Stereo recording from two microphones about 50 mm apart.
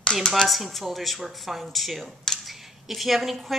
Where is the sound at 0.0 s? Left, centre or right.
Centre.